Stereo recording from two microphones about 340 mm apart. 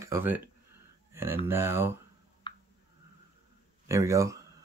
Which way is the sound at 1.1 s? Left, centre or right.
Centre.